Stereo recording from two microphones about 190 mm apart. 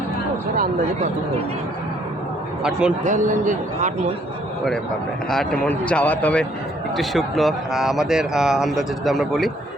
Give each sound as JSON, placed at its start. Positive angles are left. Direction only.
{"t": 3.0, "sound": "a man's voice", "side_deg": -40}
{"t": 5.3, "sound": "speech", "side_deg": 0}